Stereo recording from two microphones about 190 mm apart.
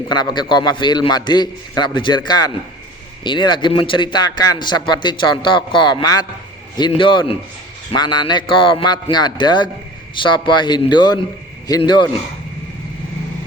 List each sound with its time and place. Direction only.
0.1 s a man's voice: 20° left (ahead or behind)